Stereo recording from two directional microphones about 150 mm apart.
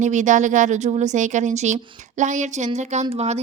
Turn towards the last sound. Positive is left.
turn(degrees=-45)  # may be behind; listen again after turning